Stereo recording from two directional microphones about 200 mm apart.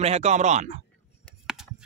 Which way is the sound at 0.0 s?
35° right (ahead or behind).